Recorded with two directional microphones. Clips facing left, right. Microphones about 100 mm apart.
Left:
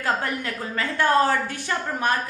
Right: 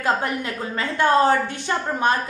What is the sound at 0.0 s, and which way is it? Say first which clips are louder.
A woman's voice: right 3 dB; 20° right (ahead or behind).